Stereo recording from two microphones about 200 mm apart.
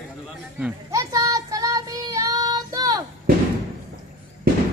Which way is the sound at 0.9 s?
15° right (ahead or behind).